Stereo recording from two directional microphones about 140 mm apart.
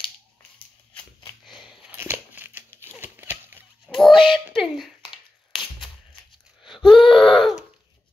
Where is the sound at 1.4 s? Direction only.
Centre (ahead or behind).